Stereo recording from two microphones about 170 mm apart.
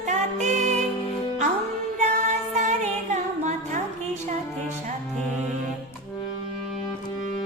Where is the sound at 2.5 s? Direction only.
45° right (ahead or behind).